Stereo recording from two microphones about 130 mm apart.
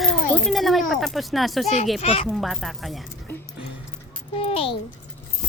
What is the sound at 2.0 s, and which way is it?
Speech, 50° left (ahead or behind).